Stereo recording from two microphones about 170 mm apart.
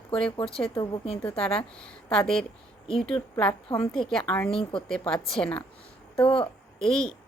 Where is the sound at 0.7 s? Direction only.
35° left (ahead or behind).